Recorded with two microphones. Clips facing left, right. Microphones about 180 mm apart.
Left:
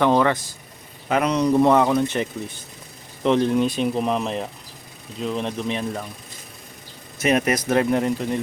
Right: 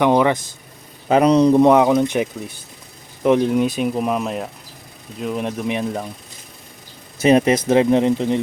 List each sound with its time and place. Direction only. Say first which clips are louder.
0.0 s speech: right 3 dB; 15° right (ahead or behind)
1.0 s speech: right 7 dB; 35° right (ahead or behind)
1.5 s speech: right 4 dB; 15° right (ahead or behind)
7.2 s speech: right 6 dB; 30° right (ahead or behind)